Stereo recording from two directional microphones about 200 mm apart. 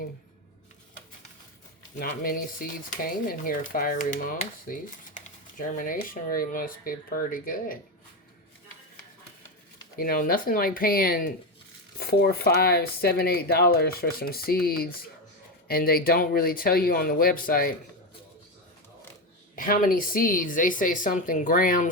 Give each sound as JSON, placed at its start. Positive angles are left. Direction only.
{"t": 2.0, "sound": "speech", "side_deg": 45}
{"t": 10.0, "sound": "speech", "side_deg": 45}
{"t": 19.5, "sound": "speech", "side_deg": 45}